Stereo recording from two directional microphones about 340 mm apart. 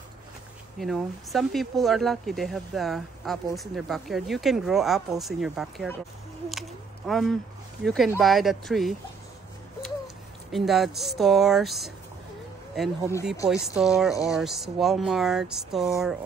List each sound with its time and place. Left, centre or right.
0.7 s speech: centre
10.5 s speech: centre